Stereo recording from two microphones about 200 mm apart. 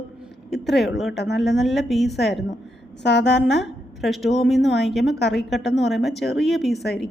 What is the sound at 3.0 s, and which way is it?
Speech, 60° left (ahead or behind).